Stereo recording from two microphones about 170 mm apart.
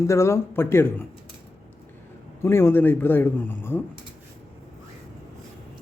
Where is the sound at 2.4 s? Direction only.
15° left (ahead or behind).